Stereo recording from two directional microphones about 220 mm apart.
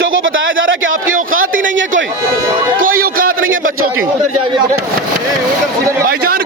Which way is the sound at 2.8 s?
40° right (ahead or behind).